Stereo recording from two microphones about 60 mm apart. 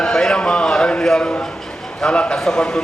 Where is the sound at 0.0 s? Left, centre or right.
Centre.